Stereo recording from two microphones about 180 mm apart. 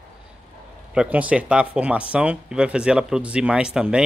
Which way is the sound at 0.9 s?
5° right (ahead or behind).